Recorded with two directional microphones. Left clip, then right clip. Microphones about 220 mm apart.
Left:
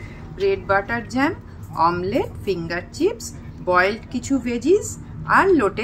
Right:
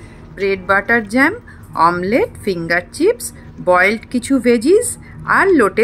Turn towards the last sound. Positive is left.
turn(degrees=-25)  # may be behind; listen again after turning